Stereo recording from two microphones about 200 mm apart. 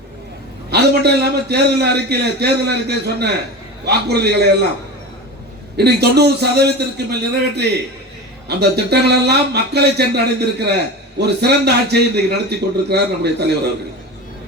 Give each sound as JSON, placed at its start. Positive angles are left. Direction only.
{"t": 0.7, "sound": "a man's voice", "side_deg": -55}
{"t": 5.7, "sound": "a man's voice", "side_deg": -55}